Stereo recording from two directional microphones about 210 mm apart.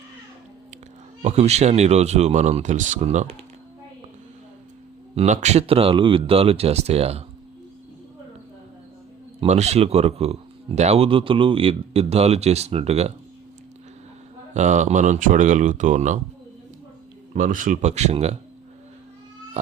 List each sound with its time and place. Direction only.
1.2 s speech: 30° right (ahead or behind)
5.1 s speech: 35° right (ahead or behind)
9.4 s speech: 30° right (ahead or behind)
14.5 s speech: 35° right (ahead or behind)
17.3 s speech: 40° right (ahead or behind)